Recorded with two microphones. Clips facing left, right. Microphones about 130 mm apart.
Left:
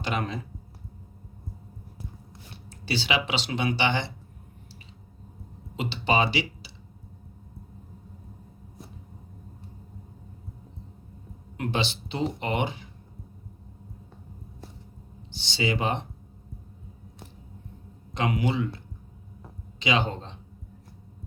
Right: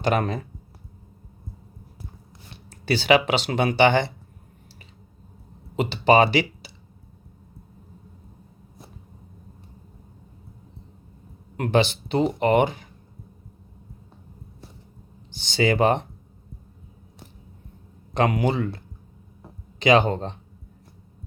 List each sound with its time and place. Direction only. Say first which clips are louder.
0.0 s speech: right 7 dB; 45° right (ahead or behind)
2.6 s speech: right 9 dB; 50° right (ahead or behind)
5.7 s speech: right 8 dB; 50° right (ahead or behind)
11.5 s speech: right 8 dB; 50° right (ahead or behind)
15.3 s speech: right 6 dB; 50° right (ahead or behind)
18.1 s speech: right 5 dB; 45° right (ahead or behind)
19.8 s speech: right 8 dB; 50° right (ahead or behind)